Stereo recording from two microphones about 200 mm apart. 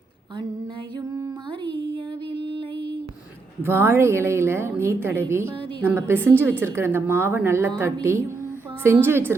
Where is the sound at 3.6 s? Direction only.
10° right (ahead or behind).